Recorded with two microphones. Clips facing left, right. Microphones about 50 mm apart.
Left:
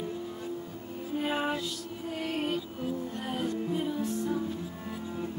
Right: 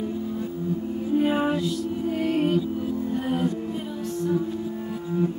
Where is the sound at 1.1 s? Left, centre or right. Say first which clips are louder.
Right 8 dB; centre.